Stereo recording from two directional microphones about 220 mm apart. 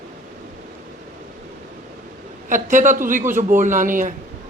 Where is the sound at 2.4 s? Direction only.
35° right (ahead or behind).